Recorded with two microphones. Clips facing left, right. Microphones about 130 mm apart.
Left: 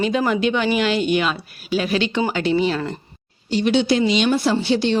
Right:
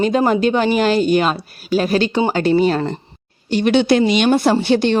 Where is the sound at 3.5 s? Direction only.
55° right (ahead or behind).